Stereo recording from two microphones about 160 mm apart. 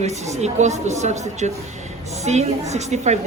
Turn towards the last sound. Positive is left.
turn(degrees=-45)  # may be behind; listen again after turning